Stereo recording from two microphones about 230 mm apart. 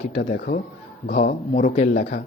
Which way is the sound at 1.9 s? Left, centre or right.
Left.